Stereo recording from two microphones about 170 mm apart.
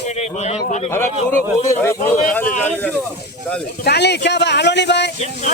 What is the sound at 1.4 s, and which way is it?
Speech, 15° left (ahead or behind).